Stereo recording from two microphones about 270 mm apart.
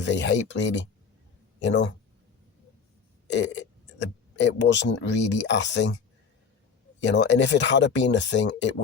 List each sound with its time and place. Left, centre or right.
0.0 s speech: left
3.2 s speech: left
7.0 s speech: left